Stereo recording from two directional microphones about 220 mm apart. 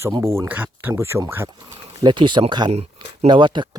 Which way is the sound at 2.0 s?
20° right (ahead or behind).